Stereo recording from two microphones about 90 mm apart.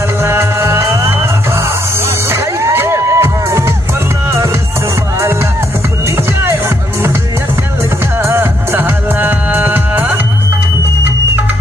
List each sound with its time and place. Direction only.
0.2 s music: 30° right (ahead or behind)
2.6 s music: 30° right (ahead or behind)
8.2 s music: 25° right (ahead or behind)